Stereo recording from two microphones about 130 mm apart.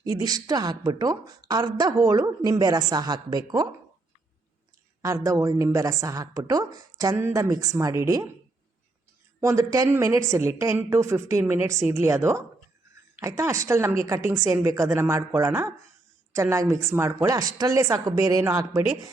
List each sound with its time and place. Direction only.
0.0 s a woman's voice: 30° right (ahead or behind)
5.0 s a woman's voice: 25° right (ahead or behind)
9.4 s a woman's voice: 25° right (ahead or behind)